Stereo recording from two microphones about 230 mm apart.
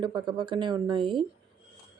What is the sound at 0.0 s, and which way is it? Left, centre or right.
Speech, centre.